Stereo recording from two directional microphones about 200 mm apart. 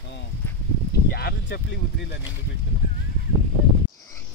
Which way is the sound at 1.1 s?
55° left (ahead or behind).